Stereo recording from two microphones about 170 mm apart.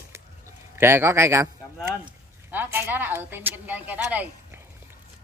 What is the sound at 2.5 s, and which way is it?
Speech, 10° right (ahead or behind).